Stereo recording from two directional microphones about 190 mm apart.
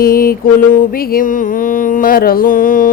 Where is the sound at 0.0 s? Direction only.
50° left (ahead or behind).